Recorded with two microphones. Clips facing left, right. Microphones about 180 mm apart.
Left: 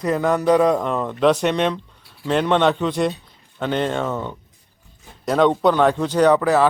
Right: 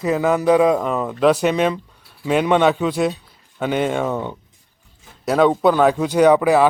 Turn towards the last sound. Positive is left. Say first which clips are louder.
# right 2 dB
turn(degrees=-10)  # may be behind; listen again after turning